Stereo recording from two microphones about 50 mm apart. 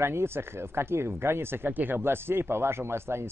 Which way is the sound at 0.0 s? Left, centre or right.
Right.